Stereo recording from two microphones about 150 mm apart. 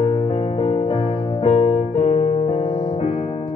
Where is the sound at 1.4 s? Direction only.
40° left (ahead or behind).